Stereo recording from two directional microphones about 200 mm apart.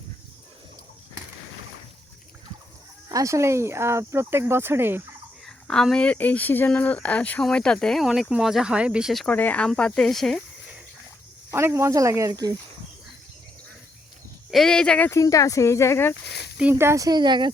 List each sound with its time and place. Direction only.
3.1 s speech: 15° right (ahead or behind)
5.5 s speech: 5° left (ahead or behind)
11.5 s speech: 15° right (ahead or behind)
14.5 s speech: 5° left (ahead or behind)
16.6 s speech: 10° right (ahead or behind)